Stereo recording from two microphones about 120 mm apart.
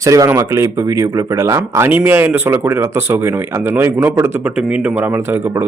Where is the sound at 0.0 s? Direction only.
25° right (ahead or behind).